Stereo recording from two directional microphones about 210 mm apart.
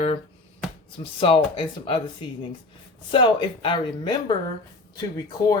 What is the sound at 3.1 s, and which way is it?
Speech, 25° left (ahead or behind).